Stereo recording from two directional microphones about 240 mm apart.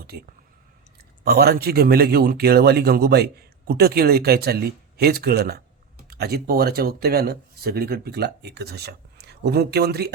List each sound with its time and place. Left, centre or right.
1.2 s speech: right